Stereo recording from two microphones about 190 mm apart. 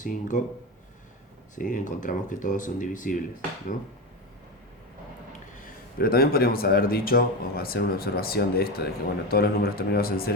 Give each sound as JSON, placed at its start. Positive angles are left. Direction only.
{"t": 0.0, "sound": "speech", "side_deg": 40}
{"t": 1.5, "sound": "speech", "side_deg": 40}
{"t": 6.0, "sound": "speech", "side_deg": 50}